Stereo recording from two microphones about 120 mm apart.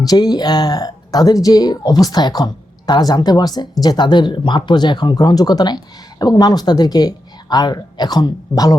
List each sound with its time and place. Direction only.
0.0 s speech: 35° left (ahead or behind)